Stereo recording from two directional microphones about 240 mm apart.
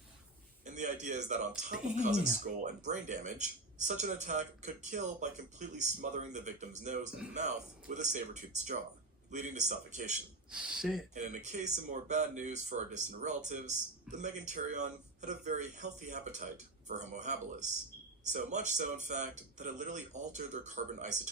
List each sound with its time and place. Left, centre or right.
0.6 s a sound: right
2.0 s speech: right
10.5 s speech: centre
11.1 s speech: right